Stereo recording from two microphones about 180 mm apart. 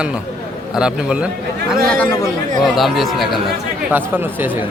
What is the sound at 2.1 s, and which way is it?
Speech, 20° left (ahead or behind).